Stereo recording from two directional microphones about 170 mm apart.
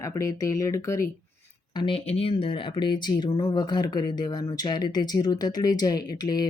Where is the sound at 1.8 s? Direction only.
30° left (ahead or behind).